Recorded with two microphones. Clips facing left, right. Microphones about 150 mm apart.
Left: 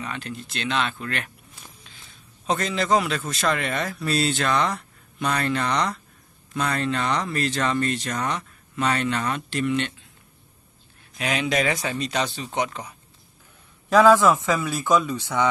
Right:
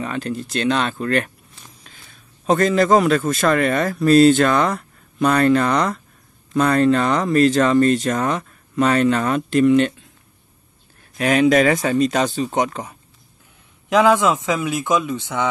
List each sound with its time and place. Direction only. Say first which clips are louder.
0.0 s speech: right 8 dB; 40° right (ahead or behind)
2.4 s a man's voice: right 9 dB; 50° right (ahead or behind)
11.1 s a man's voice: right 10 dB; 45° right (ahead or behind)
13.8 s a man's voice: even; 15° right (ahead or behind)